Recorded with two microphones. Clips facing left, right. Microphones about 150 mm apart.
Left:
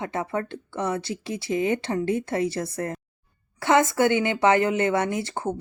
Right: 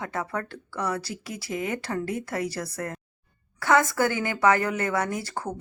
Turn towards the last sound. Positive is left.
turn(degrees=25)  # may be behind; listen again after turning